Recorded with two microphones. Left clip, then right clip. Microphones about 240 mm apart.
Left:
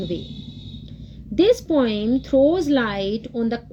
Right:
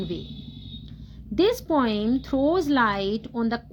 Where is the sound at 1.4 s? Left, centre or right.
Right.